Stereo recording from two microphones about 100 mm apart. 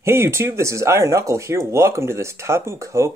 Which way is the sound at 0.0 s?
25° right (ahead or behind).